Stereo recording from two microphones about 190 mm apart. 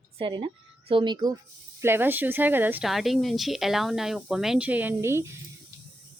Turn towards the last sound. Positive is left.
turn(degrees=-15)  # may be behind; listen again after turning